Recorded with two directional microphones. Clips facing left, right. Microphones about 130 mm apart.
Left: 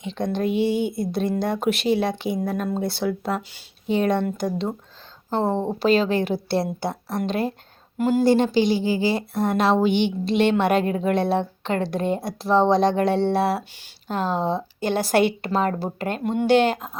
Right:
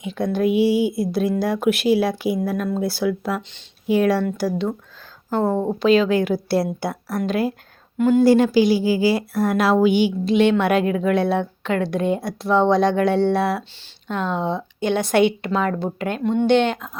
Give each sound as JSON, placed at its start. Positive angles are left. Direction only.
{"t": 0.0, "sound": "speech", "side_deg": -5}
{"t": 5.3, "sound": "speech", "side_deg": 30}
{"t": 9.7, "sound": "speech", "side_deg": -5}
{"t": 10.8, "sound": "speech", "side_deg": 40}
{"t": 11.1, "sound": "speech", "side_deg": 0}
{"t": 11.3, "sound": "speech", "side_deg": 30}
{"t": 12.6, "sound": "speech", "side_deg": 0}
{"t": 14.1, "sound": "speech", "side_deg": 35}
{"t": 14.8, "sound": "speech", "side_deg": 0}
{"t": 15.4, "sound": "speech", "side_deg": 35}
{"t": 16.4, "sound": "speech", "side_deg": 5}
{"t": 16.6, "sound": "speech", "side_deg": 40}